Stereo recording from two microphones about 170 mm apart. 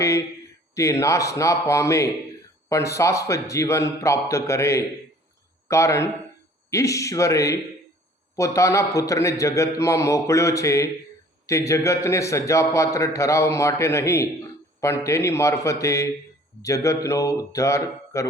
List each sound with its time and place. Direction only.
0.7 s a man's voice: 15° left (ahead or behind)